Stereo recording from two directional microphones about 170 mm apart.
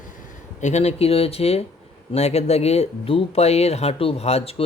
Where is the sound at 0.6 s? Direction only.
40° left (ahead or behind).